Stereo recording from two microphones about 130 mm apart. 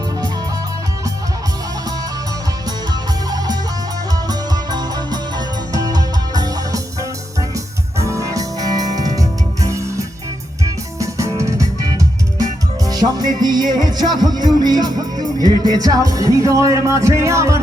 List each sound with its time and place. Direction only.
2.6 s music: 30° right (ahead or behind)